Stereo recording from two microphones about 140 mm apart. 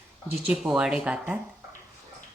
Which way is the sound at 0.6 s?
5° right (ahead or behind).